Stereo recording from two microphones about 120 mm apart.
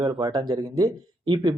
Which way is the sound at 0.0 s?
30° right (ahead or behind).